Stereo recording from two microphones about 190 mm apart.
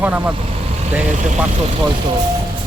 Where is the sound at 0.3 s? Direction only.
35° right (ahead or behind).